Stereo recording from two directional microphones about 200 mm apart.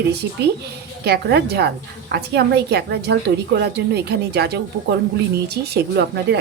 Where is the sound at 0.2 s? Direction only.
55° right (ahead or behind).